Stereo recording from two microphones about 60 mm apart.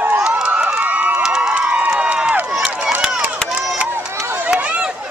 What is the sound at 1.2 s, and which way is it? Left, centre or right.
Crowd, centre.